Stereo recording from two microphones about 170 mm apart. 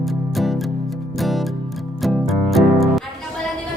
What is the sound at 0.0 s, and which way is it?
Music, centre (ahead or behind).